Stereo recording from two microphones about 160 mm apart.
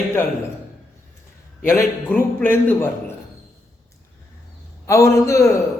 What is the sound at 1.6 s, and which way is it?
A man's voice, 10° left (ahead or behind).